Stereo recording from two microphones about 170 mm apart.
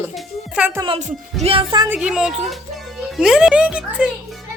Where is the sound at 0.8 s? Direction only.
35° right (ahead or behind).